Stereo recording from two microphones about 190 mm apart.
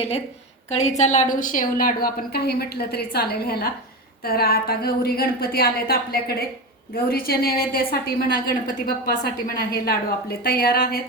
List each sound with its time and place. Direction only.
0.7 s a woman's voice: 35° left (ahead or behind)